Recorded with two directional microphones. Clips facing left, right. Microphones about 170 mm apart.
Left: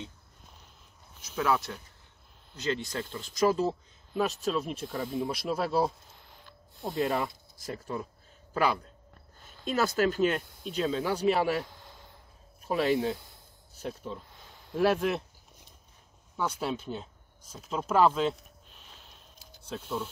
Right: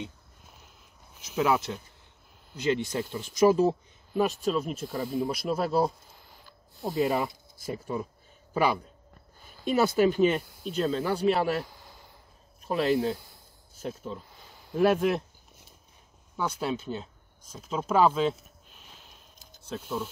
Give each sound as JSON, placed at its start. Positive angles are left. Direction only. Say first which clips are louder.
{"t": 1.3, "sound": "speech", "louder": "right 3 dB", "side_deg": -20}
{"t": 13.8, "sound": "a sound", "louder": "right 2 dB", "side_deg": 0}
{"t": 16.5, "sound": "speech", "louder": "right 2 dB", "side_deg": 0}